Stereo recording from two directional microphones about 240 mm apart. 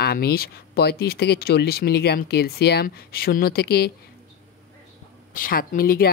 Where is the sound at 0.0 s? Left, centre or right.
Left.